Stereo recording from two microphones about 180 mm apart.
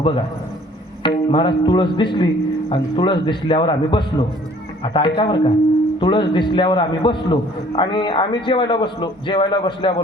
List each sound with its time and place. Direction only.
1.0 s a man's voice: 25° left (ahead or behind)